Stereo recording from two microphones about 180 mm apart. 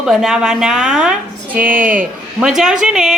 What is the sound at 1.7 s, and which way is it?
Speech, 50° right (ahead or behind).